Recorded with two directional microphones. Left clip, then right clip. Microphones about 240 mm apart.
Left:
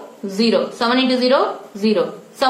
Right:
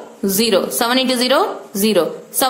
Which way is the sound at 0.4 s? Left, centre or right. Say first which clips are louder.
Right 1 dB; right.